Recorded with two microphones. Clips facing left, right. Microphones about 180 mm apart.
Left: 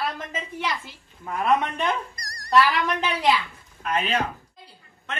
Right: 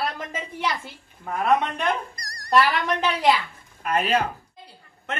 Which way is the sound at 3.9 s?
40° right (ahead or behind).